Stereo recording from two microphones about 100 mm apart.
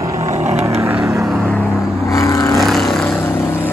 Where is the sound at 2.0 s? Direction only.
30° left (ahead or behind).